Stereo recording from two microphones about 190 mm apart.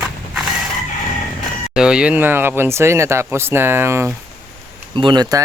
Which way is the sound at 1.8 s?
5° right (ahead or behind).